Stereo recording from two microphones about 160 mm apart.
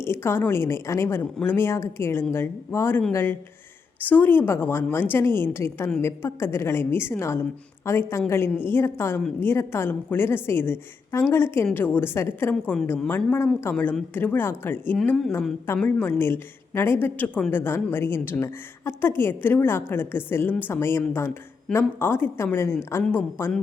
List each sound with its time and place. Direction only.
0.0 s a woman's voice: 15° left (ahead or behind)